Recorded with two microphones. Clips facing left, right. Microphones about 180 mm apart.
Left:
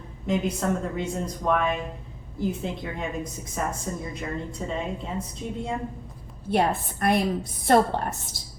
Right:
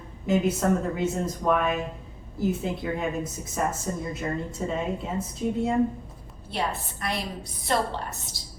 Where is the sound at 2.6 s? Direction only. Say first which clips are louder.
Right 3 dB; 5° right (ahead or behind).